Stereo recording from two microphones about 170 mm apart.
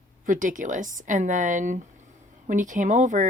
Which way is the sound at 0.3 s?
50° right (ahead or behind).